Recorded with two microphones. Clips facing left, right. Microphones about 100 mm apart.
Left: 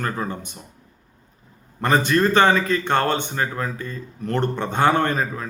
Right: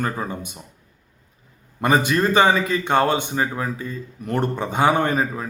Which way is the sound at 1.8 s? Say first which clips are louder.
Even; 10° right (ahead or behind).